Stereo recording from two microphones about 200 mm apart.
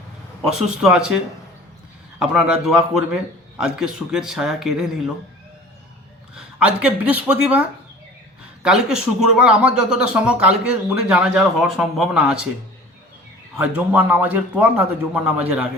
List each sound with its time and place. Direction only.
0.4 s speech: 5° right (ahead or behind)
6.3 s speech: 5° right (ahead or behind)
8.6 s speech: 5° right (ahead or behind)
13.6 s a man's voice: 5° right (ahead or behind)